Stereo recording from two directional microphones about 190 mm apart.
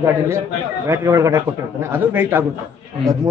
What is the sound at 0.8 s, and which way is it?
A man's voice, 15° right (ahead or behind).